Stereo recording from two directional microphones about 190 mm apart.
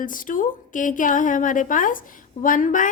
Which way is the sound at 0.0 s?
45° left (ahead or behind).